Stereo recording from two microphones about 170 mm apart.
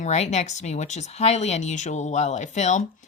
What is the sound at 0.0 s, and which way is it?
Speech, 40° left (ahead or behind).